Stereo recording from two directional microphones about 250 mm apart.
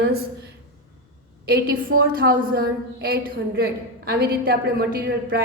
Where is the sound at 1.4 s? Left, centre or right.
Right.